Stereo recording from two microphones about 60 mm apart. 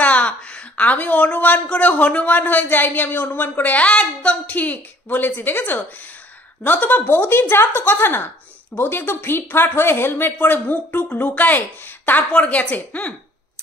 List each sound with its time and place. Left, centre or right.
0.0 s speech: left